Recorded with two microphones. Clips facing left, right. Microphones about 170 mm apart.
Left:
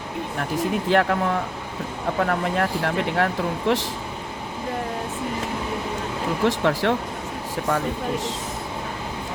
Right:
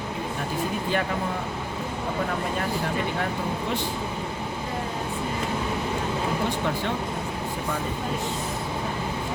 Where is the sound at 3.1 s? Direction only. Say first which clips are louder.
Left 5 dB; 80° left.